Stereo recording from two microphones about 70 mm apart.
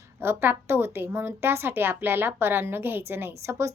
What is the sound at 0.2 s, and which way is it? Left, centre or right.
Speech, right.